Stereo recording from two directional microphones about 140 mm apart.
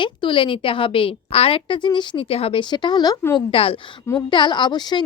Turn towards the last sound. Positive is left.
turn(degrees=30)  # may be behind; listen again after turning